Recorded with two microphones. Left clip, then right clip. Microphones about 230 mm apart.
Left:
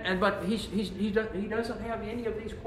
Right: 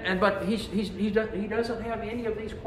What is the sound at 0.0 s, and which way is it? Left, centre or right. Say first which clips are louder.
Speech: right 3 dB; centre.